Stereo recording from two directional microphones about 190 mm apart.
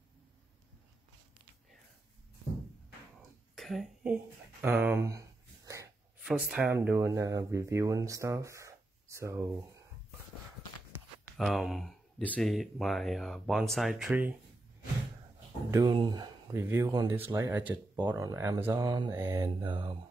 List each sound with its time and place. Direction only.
3.5 s speech: centre (ahead or behind)
6.5 s speech: 5° right (ahead or behind)
11.3 s speech: centre (ahead or behind)
15.7 s speech: 20° right (ahead or behind)